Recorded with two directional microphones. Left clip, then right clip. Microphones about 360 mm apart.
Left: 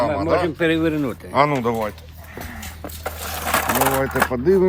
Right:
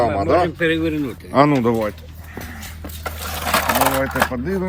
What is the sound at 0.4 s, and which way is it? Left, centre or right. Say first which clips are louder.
Speech: even; centre.